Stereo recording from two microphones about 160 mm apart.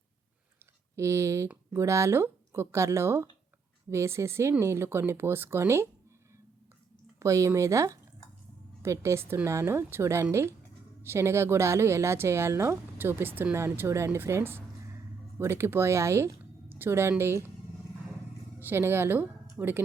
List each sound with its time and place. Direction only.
0.9 s speech: 20° right (ahead or behind)
7.2 s a woman's voice: 20° right (ahead or behind)
18.6 s speech: 15° right (ahead or behind)